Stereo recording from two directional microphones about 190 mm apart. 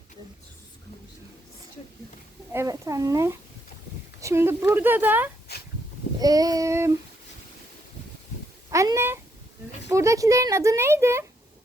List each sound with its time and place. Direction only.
2.5 s speech: 15° right (ahead or behind)
5.5 s dog: 60° left (ahead or behind)
6.1 s child singing: 20° right (ahead or behind)
8.7 s speech: 15° right (ahead or behind)